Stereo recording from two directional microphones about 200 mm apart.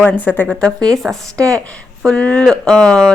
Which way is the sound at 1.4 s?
15° right (ahead or behind).